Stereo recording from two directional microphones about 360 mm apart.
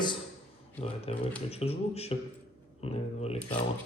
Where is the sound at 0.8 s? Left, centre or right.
Centre.